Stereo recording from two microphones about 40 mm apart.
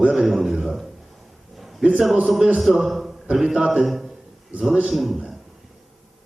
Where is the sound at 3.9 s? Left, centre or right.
Centre.